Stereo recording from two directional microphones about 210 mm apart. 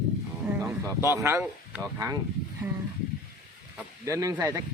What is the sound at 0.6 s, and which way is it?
A man's voice, 10° right (ahead or behind).